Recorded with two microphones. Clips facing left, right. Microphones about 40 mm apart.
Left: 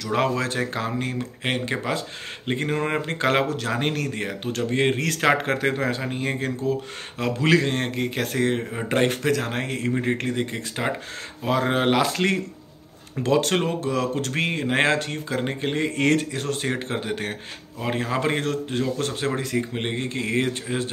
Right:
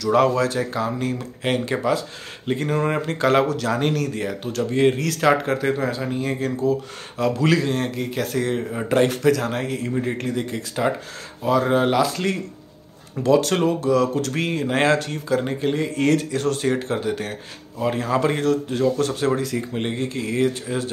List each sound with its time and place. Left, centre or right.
0.0 s speech: left
0.4 s speech: left
6.0 s speech: left
7.5 s speech: left
10.4 s speech: left
11.4 s speech: left
13.2 s speech: left
16.3 s speech: left